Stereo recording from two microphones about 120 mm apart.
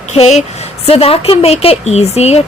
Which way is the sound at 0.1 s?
65° left (ahead or behind).